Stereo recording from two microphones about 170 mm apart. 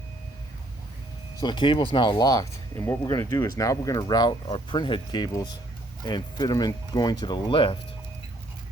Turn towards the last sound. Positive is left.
turn(degrees=30)  # may be behind; listen again after turning